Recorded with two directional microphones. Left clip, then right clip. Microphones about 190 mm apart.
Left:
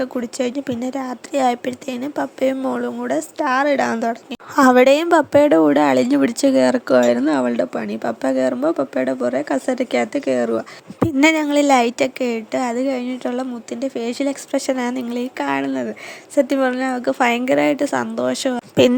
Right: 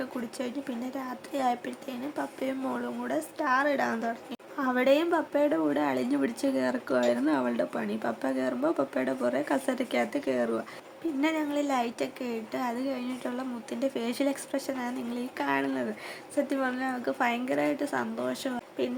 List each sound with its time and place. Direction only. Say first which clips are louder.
0.0 s speech: left 13 dB; 40° left (ahead or behind)
4.5 s speech: left 13 dB; 60° left (ahead or behind); by 10.6 s 35° left (ahead or behind)
11.2 s a woman's voice: left 14 dB; 55° left (ahead or behind); by 13.7 s 35° left (ahead or behind)
13.7 s speech: left 7 dB; 25° left (ahead or behind)
14.5 s a woman's voice: left 12 dB; 50° left (ahead or behind); by 15.9 s 35° left (ahead or behind)
16.3 s a woman's voice: left 13 dB; 45° left (ahead or behind)